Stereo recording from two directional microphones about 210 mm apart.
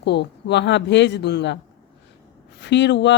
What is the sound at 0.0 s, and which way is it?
Speech, 55° left (ahead or behind).